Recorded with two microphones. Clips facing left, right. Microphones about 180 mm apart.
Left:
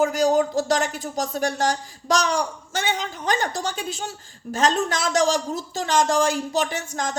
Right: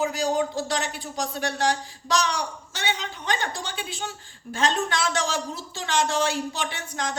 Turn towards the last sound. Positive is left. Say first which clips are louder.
# left 3 dB
turn(degrees=45)  # may be behind; listen again after turning